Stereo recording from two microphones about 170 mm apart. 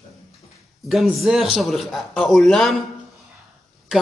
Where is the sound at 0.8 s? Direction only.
Centre (ahead or behind).